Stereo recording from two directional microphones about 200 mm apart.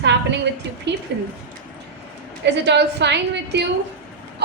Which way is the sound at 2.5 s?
60° right (ahead or behind).